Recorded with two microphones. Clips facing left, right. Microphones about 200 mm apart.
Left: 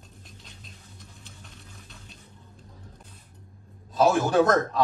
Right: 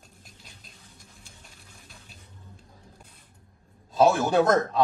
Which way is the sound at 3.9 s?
20° right (ahead or behind).